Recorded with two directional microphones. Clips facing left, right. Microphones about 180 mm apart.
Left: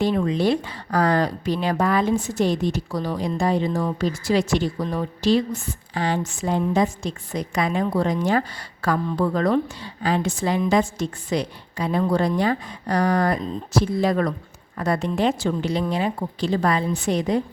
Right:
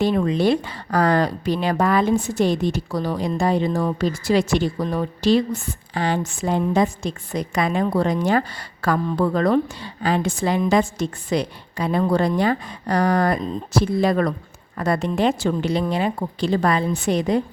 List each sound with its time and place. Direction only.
0.0 s a woman's voice: 60° right (ahead or behind)